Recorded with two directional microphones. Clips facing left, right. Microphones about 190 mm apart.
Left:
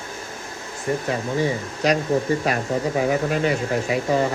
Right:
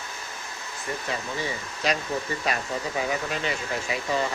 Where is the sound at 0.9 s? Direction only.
45° left (ahead or behind).